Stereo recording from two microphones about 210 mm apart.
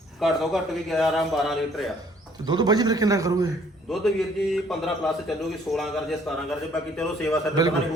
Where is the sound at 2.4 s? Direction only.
20° right (ahead or behind).